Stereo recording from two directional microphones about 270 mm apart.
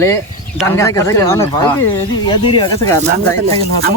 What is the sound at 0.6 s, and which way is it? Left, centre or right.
Speech, centre.